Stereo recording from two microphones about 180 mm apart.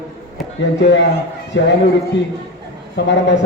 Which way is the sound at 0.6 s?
80° left.